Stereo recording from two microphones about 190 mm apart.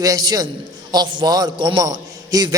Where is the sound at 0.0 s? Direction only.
20° right (ahead or behind).